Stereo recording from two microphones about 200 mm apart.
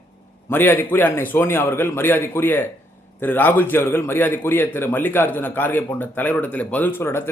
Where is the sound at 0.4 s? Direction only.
10° left (ahead or behind).